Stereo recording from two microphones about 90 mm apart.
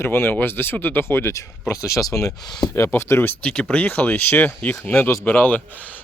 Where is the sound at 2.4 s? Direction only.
55° left (ahead or behind).